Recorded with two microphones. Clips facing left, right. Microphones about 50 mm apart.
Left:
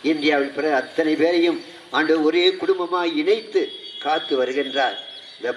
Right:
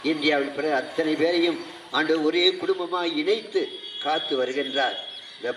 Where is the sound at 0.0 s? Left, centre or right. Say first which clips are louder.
Left 4 dB; centre.